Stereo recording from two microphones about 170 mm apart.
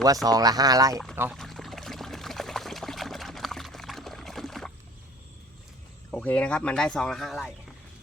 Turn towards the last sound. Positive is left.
turn(degrees=0)  # may be behind; listen again after turning